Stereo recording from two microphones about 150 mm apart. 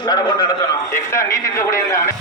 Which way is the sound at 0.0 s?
30° left (ahead or behind).